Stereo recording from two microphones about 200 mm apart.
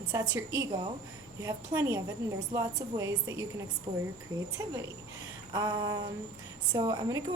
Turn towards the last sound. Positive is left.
turn(degrees=-20)  # may be behind; listen again after turning